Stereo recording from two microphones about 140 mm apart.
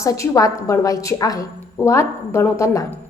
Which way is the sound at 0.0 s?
20° left (ahead or behind).